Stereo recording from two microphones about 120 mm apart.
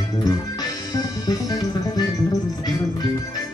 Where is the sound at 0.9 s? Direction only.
30° left (ahead or behind).